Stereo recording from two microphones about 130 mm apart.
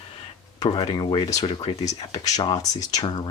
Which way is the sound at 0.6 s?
35° left (ahead or behind).